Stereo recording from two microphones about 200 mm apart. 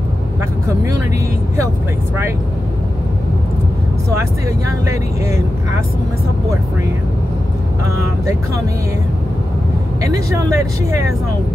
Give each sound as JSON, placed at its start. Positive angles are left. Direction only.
{"t": 10.0, "sound": "speech", "side_deg": -15}